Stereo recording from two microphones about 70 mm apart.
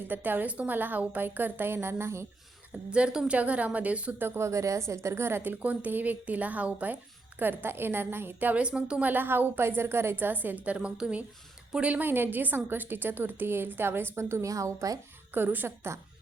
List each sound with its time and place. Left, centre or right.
0.1 s a woman's voice: right
2.9 s a woman's voice: centre
4.2 s a woman's voice: right; by 11.9 s centre
11.9 s a woman's voice: right
14.5 s speech: right
15.3 s a woman's voice: right